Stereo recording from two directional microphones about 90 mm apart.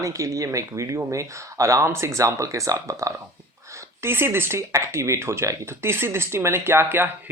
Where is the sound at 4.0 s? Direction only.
25° right (ahead or behind).